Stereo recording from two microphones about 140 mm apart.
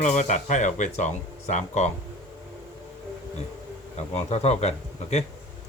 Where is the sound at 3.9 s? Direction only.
50° left (ahead or behind).